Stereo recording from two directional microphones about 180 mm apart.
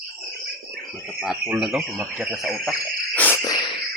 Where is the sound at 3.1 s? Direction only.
10° left (ahead or behind).